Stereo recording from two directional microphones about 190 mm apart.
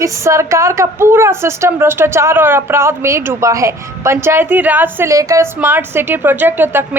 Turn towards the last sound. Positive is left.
turn(degrees=-10)  # may be behind; listen again after turning